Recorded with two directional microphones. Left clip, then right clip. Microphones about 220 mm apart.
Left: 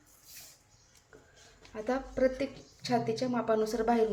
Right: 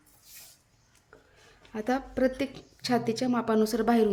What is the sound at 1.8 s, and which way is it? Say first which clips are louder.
A woman's voice: right 2 dB; 50° right (ahead or behind).